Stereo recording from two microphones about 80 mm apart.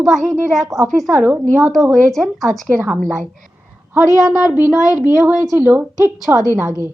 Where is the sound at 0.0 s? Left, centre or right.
Centre.